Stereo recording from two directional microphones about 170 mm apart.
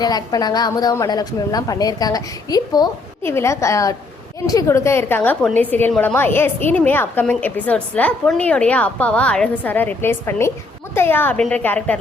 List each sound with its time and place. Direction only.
0.0 s a woman's voice: 25° left (ahead or behind)